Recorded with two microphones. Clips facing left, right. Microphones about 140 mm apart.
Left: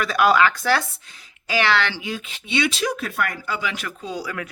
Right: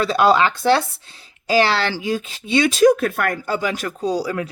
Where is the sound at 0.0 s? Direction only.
30° right (ahead or behind).